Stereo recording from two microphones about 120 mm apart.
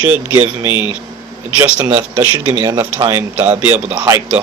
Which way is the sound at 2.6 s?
25° right (ahead or behind).